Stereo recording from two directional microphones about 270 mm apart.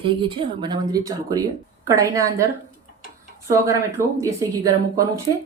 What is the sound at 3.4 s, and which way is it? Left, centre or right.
Speech, centre.